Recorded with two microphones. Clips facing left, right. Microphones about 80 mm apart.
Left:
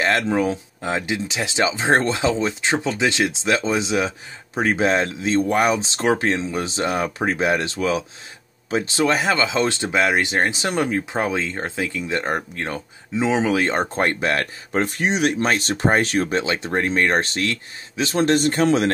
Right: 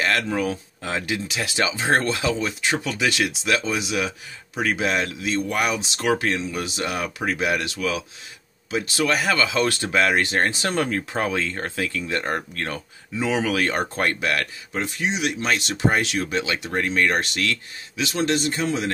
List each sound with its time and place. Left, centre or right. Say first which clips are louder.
0.0 s speech: left 3 dB; left
14.8 s speech: left 5 dB; left